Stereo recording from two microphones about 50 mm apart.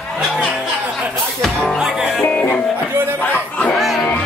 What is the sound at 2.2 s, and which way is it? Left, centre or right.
Music, left.